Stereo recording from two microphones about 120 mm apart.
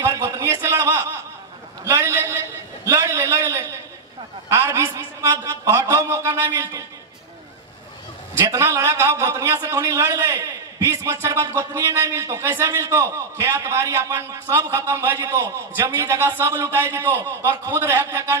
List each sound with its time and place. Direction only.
0.0 s a sound: 20° right (ahead or behind)
1.9 s a man's voice: 20° right (ahead or behind)
8.5 s a man's voice: 25° right (ahead or behind)